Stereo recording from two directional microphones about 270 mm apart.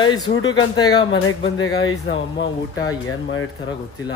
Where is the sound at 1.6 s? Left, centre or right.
Left.